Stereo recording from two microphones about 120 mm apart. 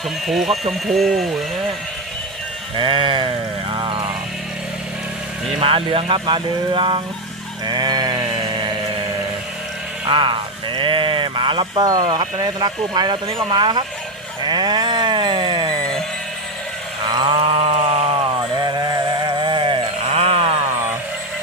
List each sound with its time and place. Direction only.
0.3 s speech: centre (ahead or behind)
2.7 s a sound: 45° right (ahead or behind)
5.5 s speech: 50° right (ahead or behind)
7.7 s sheep: 35° right (ahead or behind)
10.1 s speech: 40° right (ahead or behind)
14.4 s sheep: 35° right (ahead or behind)
17.1 s a sound: 40° right (ahead or behind); by 18.2 s 55° right (ahead or behind)
18.5 s sheep: 35° right (ahead or behind); by 20.6 s 55° right (ahead or behind)